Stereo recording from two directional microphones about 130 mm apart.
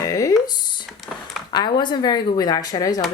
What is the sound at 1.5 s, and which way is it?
Speech, 35° left (ahead or behind).